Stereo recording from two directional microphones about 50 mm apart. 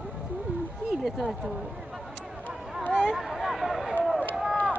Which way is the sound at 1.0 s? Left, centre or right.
Centre.